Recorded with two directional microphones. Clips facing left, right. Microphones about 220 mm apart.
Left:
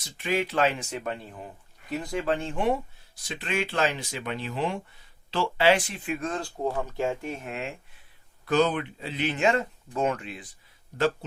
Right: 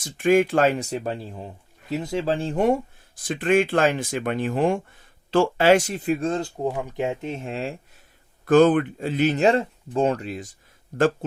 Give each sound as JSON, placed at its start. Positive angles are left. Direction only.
{"t": 0.0, "sound": "speech", "side_deg": -50}
{"t": 8.4, "sound": "speech", "side_deg": -50}